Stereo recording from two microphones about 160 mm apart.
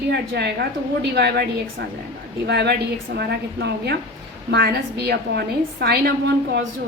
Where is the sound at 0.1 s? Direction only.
90° right.